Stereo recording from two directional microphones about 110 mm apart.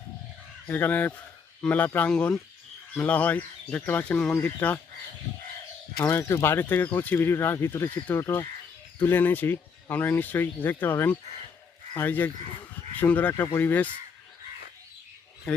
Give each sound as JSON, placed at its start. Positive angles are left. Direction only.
{"t": 0.7, "sound": "speech", "side_deg": 15}
{"t": 6.0, "sound": "speech", "side_deg": 20}
{"t": 15.5, "sound": "speech", "side_deg": 10}